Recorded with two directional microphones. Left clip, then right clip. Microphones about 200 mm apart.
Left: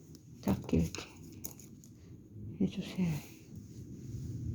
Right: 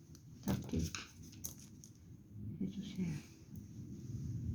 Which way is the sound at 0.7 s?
50° left (ahead or behind).